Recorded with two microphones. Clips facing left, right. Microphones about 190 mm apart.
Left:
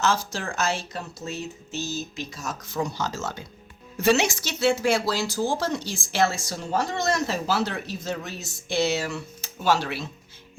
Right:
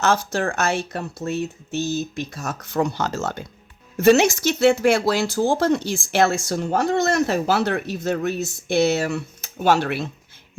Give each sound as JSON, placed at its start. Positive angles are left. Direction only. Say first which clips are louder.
{"t": 0.0, "sound": "speech", "louder": "right 5 dB", "side_deg": -65}